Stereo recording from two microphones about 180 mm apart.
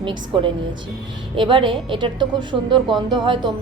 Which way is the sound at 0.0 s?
25° right (ahead or behind).